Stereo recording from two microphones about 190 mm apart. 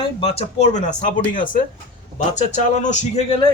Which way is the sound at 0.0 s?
30° left (ahead or behind).